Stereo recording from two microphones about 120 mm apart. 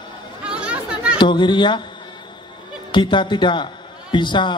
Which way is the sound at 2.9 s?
40° left (ahead or behind).